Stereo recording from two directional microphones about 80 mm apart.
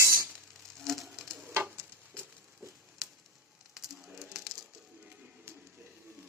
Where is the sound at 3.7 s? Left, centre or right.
Centre.